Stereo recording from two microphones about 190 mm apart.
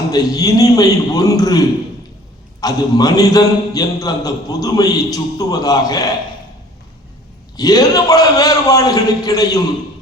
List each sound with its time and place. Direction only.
0.1 s a man's voice: 20° left (ahead or behind)
7.5 s a man's voice: 20° left (ahead or behind)